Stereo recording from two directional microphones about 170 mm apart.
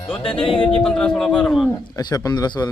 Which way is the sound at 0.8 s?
5° left (ahead or behind).